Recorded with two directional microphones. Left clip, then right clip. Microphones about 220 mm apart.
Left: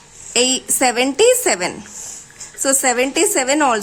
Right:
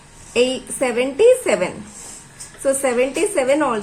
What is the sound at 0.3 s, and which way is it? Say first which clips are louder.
A woman's voice: left 1 dB; 45° left (ahead or behind).